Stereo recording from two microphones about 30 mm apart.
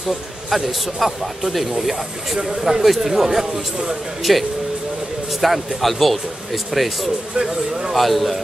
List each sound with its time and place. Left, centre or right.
0.7 s a man's voice: centre
7.3 s speech: right
7.9 s speech: centre